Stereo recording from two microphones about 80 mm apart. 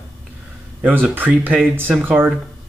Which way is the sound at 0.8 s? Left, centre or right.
Right.